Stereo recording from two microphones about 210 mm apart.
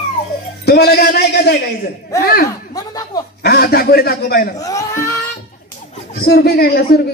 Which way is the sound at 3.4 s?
50° left (ahead or behind).